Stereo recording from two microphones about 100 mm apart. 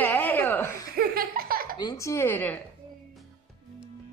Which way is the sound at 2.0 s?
30° left (ahead or behind).